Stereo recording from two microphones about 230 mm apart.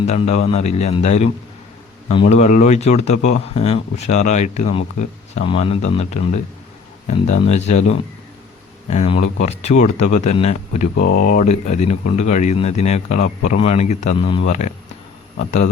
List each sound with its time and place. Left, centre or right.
0.0 s speech: left
10.9 s speech: left